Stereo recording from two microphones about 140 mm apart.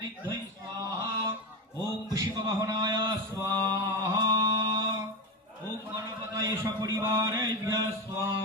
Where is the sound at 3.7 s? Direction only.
25° right (ahead or behind).